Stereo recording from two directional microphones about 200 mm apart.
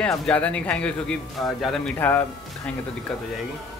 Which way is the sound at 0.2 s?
5° left (ahead or behind).